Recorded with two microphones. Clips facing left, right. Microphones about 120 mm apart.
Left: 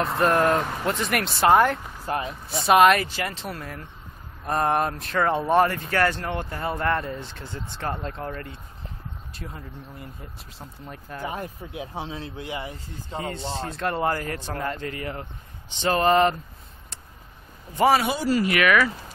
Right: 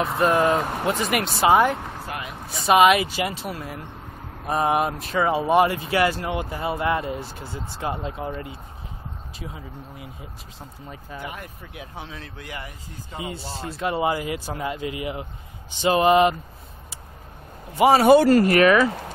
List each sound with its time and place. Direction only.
0.0 s speech: centre (ahead or behind)
2.0 s speech: 35° left (ahead or behind)
2.5 s speech: centre (ahead or behind)
3.4 s speech: 5° right (ahead or behind)
9.3 s speech: 5° right (ahead or behind)
11.2 s speech: 30° left (ahead or behind)
13.2 s speech: 10° right (ahead or behind)
18.0 s speech: 60° right (ahead or behind)
18.5 s speech: 35° right (ahead or behind)